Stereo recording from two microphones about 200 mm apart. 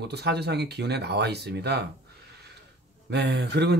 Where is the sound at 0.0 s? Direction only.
55° right (ahead or behind).